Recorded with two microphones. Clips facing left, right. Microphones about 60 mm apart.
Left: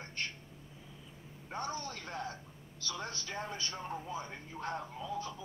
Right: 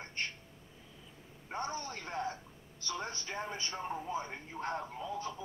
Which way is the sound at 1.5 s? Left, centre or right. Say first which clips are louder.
Right 1 dB; right.